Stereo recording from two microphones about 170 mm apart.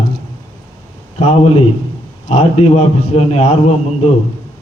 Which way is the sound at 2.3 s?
40° left (ahead or behind).